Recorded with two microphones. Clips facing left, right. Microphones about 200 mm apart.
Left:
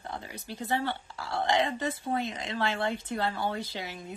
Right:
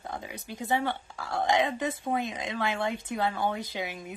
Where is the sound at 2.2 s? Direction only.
15° right (ahead or behind).